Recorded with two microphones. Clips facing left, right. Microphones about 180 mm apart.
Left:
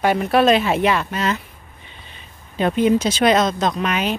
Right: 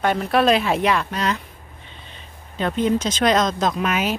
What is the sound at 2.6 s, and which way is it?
Speech, 10° left (ahead or behind).